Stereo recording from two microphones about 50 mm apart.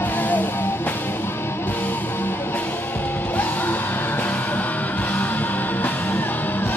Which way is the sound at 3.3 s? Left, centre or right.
Left.